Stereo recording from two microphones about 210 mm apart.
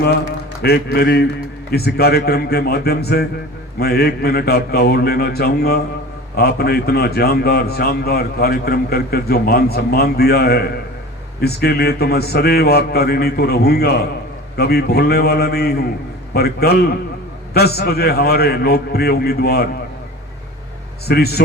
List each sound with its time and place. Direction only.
0.6 s a man's voice: 50° left (ahead or behind)
21.1 s a man's voice: 50° left (ahead or behind)